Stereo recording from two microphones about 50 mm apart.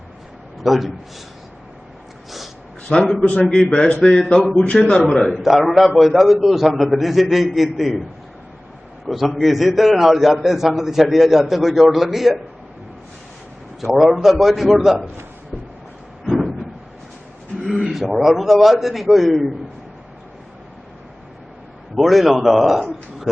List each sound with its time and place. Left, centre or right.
0.6 s a man's voice: centre
2.9 s speech: centre
3.7 s a man's voice: left
5.0 s a man's voice: centre
9.1 s a man's voice: centre
13.8 s a man's voice: centre
16.2 s a sound: centre
18.1 s a man's voice: centre
21.9 s a man's voice: centre